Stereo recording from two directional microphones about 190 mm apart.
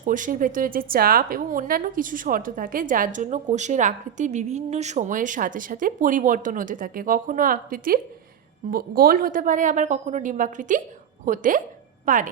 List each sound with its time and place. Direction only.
0.0 s a woman's voice: 45° right (ahead or behind)